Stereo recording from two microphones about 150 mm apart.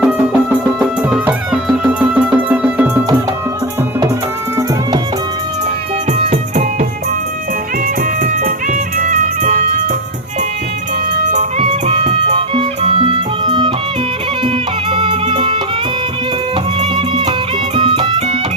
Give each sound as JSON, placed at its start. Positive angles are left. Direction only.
{"t": 0.0, "sound": "music", "side_deg": -10}
{"t": 6.1, "sound": "music", "side_deg": -50}
{"t": 8.2, "sound": "music", "side_deg": -60}
{"t": 11.3, "sound": "music", "side_deg": -50}
{"t": 17.7, "sound": "music", "side_deg": -35}